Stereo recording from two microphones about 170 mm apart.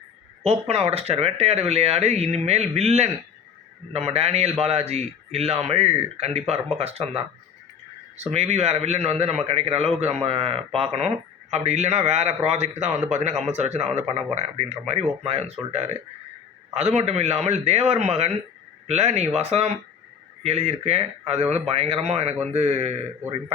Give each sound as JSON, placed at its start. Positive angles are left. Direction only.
{"t": 0.4, "sound": "a man's voice", "side_deg": -40}